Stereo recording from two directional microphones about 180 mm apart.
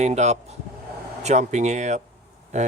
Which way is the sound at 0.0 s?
40° right (ahead or behind).